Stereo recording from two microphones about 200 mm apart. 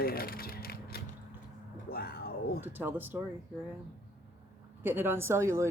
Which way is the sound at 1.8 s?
50° left (ahead or behind).